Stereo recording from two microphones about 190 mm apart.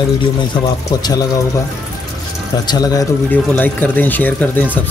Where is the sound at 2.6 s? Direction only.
20° left (ahead or behind).